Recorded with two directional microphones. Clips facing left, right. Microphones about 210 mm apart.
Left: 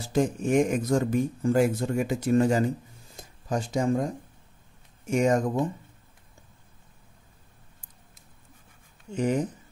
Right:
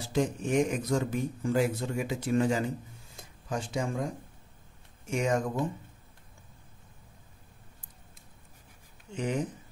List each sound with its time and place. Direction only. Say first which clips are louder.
0.1 s speech: left 4 dB; 50° left (ahead or behind)
5.1 s speech: left 6 dB; 45° left (ahead or behind)
9.1 s speech: left 6 dB; 40° left (ahead or behind)